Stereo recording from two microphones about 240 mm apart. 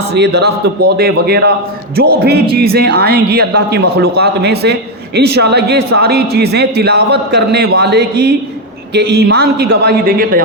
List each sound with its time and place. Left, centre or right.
0.1 s a man's voice: right